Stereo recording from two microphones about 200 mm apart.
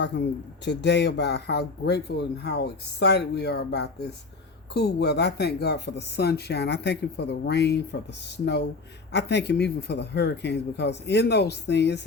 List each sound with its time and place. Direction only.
0.0 s speech: 60° left (ahead or behind)
9.1 s speech: 55° left (ahead or behind)